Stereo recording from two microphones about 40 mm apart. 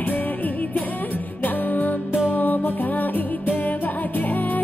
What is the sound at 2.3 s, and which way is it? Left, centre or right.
Music, left.